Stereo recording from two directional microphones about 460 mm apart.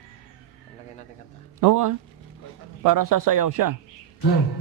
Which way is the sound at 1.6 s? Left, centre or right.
Right.